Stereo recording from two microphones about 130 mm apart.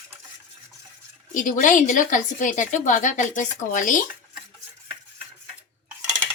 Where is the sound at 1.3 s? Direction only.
85° left.